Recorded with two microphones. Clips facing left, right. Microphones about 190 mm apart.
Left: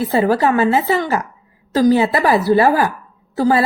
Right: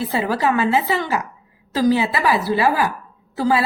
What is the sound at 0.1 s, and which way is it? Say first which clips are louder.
A woman's voice: left 6 dB; 45° left (ahead or behind).